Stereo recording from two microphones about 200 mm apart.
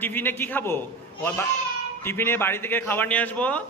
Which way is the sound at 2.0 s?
10° left (ahead or behind).